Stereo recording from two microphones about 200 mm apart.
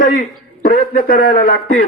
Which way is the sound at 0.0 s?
45° left (ahead or behind).